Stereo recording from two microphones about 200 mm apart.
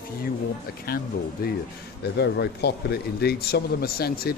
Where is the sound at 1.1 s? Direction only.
50° left (ahead or behind).